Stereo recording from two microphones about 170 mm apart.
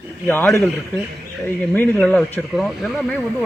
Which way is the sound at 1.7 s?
Centre (ahead or behind).